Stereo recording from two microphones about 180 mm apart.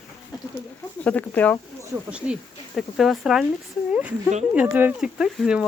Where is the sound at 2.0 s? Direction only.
5° right (ahead or behind).